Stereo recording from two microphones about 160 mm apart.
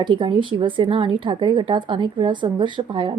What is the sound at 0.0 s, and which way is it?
A woman's voice, 30° right (ahead or behind).